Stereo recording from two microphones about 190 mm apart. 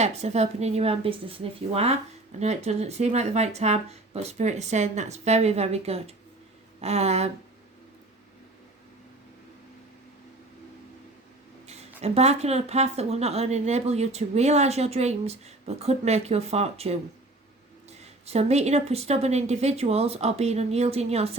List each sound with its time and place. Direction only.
0.0 s speech: 35° right (ahead or behind)
11.6 s a sound: 35° right (ahead or behind)
12.0 s speech: 35° right (ahead or behind)
18.0 s speech: 35° right (ahead or behind)